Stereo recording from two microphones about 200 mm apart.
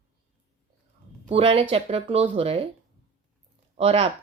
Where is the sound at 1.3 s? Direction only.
30° right (ahead or behind).